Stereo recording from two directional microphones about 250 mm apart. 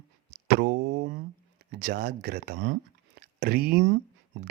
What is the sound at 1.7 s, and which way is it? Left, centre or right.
Speech, right.